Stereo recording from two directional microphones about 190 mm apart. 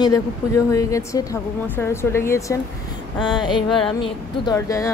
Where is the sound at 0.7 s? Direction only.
15° left (ahead or behind).